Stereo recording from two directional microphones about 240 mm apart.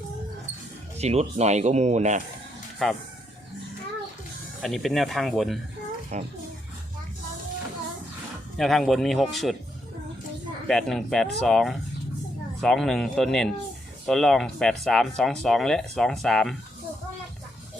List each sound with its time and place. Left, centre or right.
0.9 s speech: right
2.8 s speech: centre
4.6 s speech: centre
6.1 s speech: right
8.5 s speech: centre
10.7 s speech: centre